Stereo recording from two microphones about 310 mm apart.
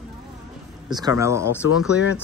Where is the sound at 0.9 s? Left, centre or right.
Centre.